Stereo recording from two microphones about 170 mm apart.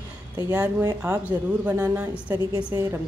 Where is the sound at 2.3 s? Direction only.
20° right (ahead or behind).